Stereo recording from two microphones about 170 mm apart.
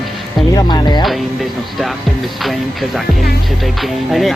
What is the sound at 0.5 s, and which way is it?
Speech, 25° left (ahead or behind).